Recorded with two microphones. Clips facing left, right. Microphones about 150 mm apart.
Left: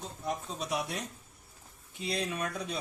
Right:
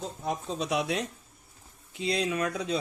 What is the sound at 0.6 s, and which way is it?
Speech, 90° right.